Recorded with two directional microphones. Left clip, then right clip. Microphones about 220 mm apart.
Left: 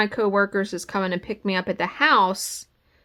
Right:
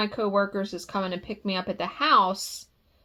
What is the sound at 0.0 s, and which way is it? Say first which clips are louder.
Speech: left 4 dB; 40° left (ahead or behind).